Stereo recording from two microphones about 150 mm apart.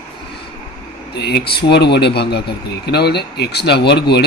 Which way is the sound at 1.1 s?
90° left.